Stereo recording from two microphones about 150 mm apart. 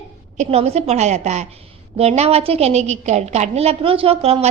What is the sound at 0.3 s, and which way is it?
A woman's voice, 45° right (ahead or behind).